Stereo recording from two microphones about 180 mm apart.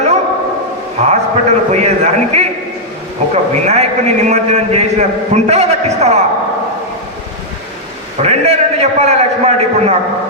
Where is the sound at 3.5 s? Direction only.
40° right (ahead or behind).